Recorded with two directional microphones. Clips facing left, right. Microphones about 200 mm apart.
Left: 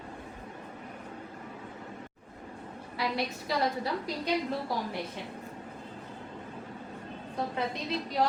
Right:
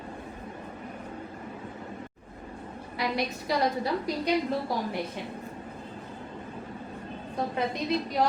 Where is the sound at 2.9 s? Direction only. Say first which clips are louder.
Right 2 dB; 15° right (ahead or behind).